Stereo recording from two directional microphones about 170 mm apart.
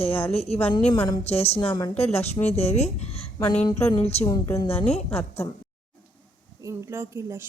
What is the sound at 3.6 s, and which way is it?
Speech, 25° left (ahead or behind).